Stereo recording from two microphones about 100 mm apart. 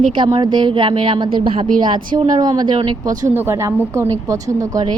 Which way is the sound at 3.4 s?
25° right (ahead or behind).